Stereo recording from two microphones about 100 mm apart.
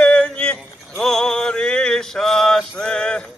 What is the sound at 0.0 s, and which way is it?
Mantra, 10° left (ahead or behind).